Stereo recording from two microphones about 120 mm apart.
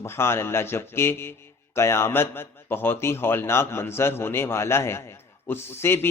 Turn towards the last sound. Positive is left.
turn(degrees=20)  # may be behind; listen again after turning